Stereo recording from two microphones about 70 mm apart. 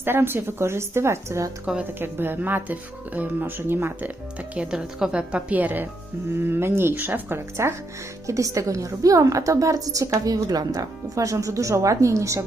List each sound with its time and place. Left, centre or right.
0.0 s a woman's voice: right
1.6 s speech: centre
2.0 s speech: right
4.5 s a woman's voice: centre; by 12.4 s right